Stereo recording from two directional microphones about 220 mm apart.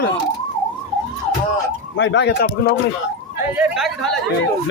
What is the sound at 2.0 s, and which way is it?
Speech, 55° left (ahead or behind).